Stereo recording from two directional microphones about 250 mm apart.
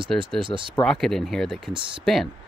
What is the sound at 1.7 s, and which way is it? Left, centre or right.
Speech, centre.